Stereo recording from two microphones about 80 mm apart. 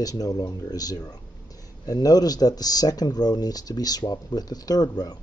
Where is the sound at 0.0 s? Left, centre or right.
Left.